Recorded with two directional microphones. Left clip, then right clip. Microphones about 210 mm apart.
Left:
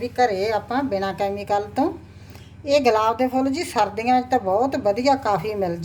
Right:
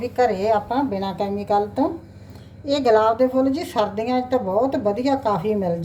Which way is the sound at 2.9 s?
40° left (ahead or behind).